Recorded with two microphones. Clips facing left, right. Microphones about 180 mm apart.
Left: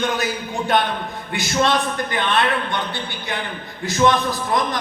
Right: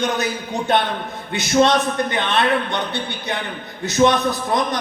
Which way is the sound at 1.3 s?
20° right (ahead or behind).